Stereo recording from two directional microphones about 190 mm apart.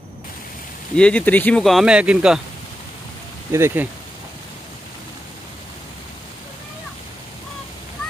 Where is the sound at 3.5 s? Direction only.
15° right (ahead or behind).